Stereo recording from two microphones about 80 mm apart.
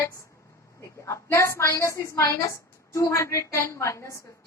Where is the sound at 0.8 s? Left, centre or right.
Left.